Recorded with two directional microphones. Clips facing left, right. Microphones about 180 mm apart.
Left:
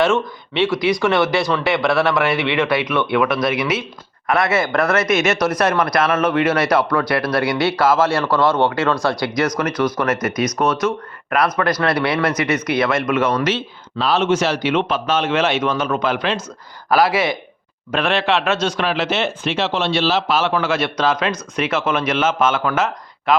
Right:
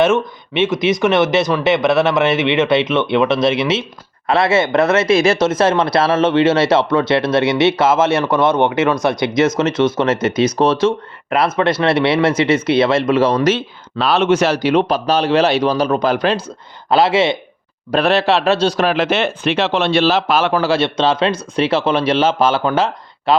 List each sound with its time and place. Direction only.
0.0 s speech: 20° right (ahead or behind)
14.0 s a man's voice: 65° right (ahead or behind)
14.5 s a man's voice: 40° right (ahead or behind)
16.9 s speech: 25° right (ahead or behind)
17.9 s a man's voice: 40° right (ahead or behind)
18.9 s a man's voice: 55° right (ahead or behind)
20.6 s a man's voice: 30° right (ahead or behind)